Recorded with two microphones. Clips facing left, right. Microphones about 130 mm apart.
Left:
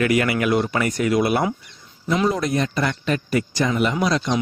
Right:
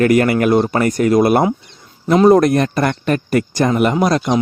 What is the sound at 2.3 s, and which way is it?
Speech, 60° right (ahead or behind).